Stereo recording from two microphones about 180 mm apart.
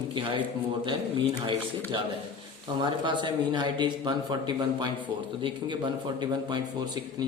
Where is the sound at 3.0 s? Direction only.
25° right (ahead or behind).